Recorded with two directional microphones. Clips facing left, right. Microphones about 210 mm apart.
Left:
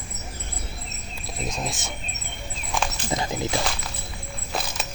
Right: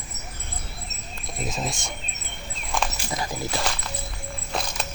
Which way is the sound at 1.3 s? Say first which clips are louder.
Right 1 dB; centre (ahead or behind).